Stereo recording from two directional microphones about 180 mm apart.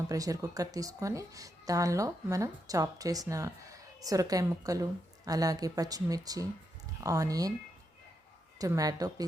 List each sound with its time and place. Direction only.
0.1 s a woman's voice: 20° right (ahead or behind)
8.5 s a woman's voice: 20° right (ahead or behind)